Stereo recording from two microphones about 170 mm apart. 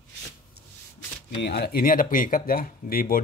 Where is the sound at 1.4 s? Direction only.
70° left (ahead or behind).